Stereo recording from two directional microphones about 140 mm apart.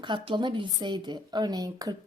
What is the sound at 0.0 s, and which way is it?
A woman's voice, 35° right (ahead or behind).